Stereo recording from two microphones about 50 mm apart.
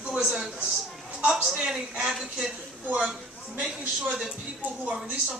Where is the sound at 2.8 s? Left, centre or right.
Right.